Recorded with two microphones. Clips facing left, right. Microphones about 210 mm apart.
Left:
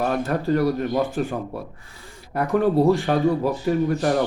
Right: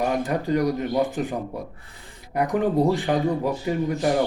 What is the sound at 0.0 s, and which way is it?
Speech, 15° right (ahead or behind).